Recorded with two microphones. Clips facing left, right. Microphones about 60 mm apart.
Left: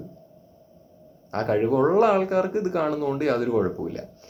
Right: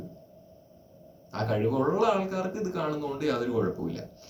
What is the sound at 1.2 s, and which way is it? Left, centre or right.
Speech, left.